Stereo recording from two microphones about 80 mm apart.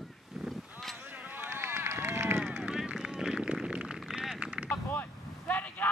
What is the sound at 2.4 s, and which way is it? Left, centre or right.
Run, centre.